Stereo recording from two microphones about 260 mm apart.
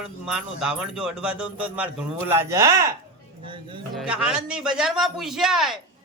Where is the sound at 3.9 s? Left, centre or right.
Centre.